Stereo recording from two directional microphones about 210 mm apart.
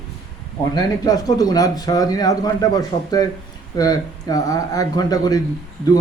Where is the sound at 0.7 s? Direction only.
20° left (ahead or behind).